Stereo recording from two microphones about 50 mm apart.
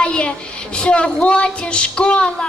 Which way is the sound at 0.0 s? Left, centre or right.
Left.